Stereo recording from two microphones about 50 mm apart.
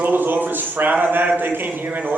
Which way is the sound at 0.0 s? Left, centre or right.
Right.